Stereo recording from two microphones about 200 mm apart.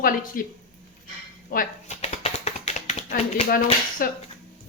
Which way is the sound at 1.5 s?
45° left (ahead or behind).